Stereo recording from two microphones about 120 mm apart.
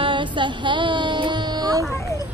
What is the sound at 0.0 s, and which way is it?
Music, 40° right (ahead or behind).